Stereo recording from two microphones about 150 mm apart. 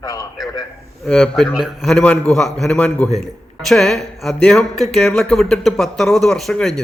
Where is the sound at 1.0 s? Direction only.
5° left (ahead or behind).